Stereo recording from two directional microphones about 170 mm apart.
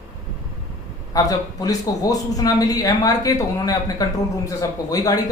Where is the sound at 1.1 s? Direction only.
20° left (ahead or behind).